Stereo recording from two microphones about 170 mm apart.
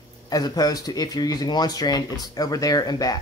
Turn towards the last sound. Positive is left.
turn(degrees=20)  # may be behind; listen again after turning